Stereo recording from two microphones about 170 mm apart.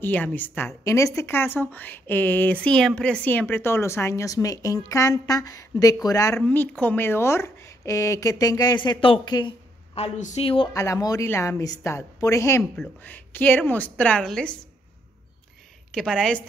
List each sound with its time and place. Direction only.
0.0 s a woman's voice: 10° left (ahead or behind)
6.4 s a woman's voice: 10° left (ahead or behind); by 10.7 s 35° left (ahead or behind)
10.7 s a woman's voice: 20° left (ahead or behind)
12.7 s a woman's voice: 5° left (ahead or behind)
15.9 s a woman's voice: 5° left (ahead or behind)